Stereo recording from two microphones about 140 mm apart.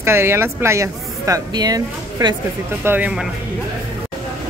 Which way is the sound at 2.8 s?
15° right (ahead or behind).